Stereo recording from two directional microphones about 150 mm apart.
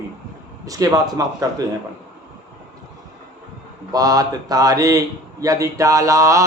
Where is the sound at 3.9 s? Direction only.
25° right (ahead or behind).